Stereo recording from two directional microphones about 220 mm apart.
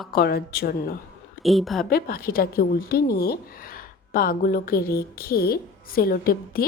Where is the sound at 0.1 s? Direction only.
45° left (ahead or behind).